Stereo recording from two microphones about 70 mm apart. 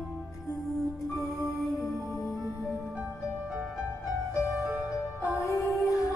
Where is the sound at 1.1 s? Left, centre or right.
Centre.